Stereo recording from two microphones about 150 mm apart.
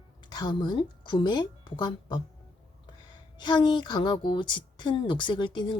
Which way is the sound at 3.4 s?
30° left (ahead or behind).